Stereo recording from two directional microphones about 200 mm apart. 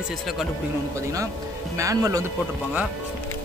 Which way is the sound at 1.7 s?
15° right (ahead or behind).